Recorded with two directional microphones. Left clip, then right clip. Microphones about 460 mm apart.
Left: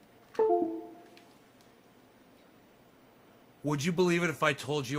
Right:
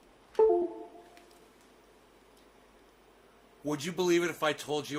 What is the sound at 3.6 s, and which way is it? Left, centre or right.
Speech, left.